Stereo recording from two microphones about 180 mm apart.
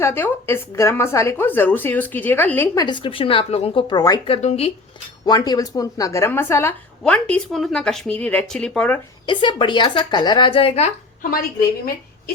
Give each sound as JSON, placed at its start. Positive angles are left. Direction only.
{"t": 0.0, "sound": "a woman's voice", "side_deg": 15}
{"t": 2.8, "sound": "a woman's voice", "side_deg": 25}
{"t": 4.4, "sound": "speech", "side_deg": 35}
{"t": 5.5, "sound": "a woman's voice", "side_deg": 20}
{"t": 9.2, "sound": "a woman's voice", "side_deg": 25}